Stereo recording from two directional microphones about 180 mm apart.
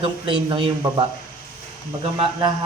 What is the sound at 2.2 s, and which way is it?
Speech, 25° right (ahead or behind).